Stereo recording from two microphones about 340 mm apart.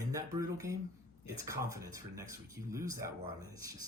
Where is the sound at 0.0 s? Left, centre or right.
Centre.